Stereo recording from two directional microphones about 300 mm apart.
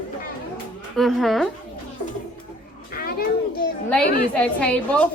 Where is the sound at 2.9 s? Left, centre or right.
Left.